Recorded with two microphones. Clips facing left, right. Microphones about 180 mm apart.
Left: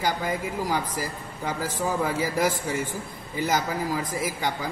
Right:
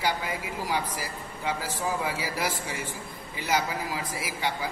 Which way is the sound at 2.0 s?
45° left (ahead or behind).